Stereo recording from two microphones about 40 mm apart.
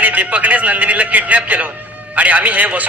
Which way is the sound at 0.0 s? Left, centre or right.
Right.